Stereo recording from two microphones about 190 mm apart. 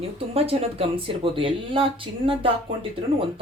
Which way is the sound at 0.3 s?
30° right (ahead or behind).